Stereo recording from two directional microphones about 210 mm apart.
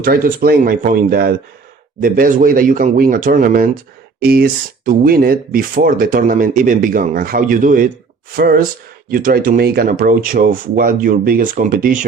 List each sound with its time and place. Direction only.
0.0 s speech: 45° right (ahead or behind)